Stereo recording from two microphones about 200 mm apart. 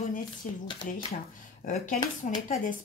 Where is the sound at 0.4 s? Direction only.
40° left (ahead or behind).